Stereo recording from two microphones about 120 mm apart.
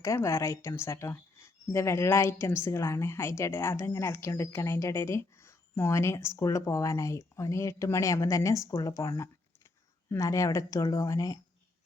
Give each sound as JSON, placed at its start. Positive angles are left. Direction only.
{"t": 0.0, "sound": "a woman's voice", "side_deg": 25}